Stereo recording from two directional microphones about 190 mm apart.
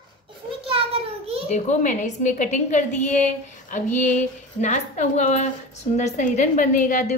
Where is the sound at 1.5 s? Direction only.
40° left (ahead or behind).